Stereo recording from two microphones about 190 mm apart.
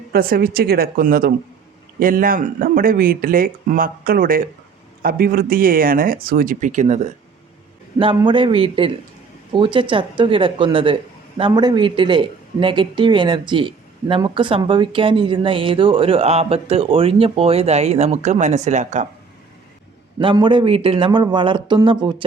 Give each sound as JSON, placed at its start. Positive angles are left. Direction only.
{"t": 0.1, "sound": "speech", "side_deg": -50}
{"t": 7.9, "sound": "a man's voice", "side_deg": -25}
{"t": 20.1, "sound": "a man's voice", "side_deg": -25}